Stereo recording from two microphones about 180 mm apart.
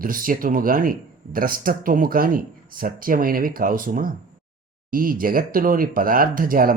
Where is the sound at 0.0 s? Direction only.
50° right (ahead or behind).